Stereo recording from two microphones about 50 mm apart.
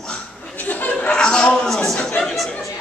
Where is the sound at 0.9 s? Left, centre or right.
Centre.